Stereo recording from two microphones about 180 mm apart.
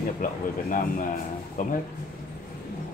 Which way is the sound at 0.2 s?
45° left (ahead or behind).